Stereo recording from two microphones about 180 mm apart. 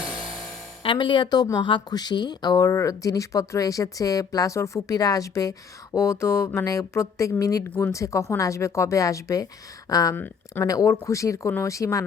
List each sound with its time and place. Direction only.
0.8 s speech: 30° left (ahead or behind)